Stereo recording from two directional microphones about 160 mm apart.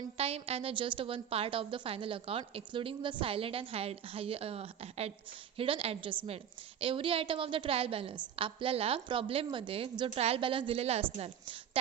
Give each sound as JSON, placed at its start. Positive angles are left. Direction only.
{"t": 0.2, "sound": "a woman's voice", "side_deg": -40}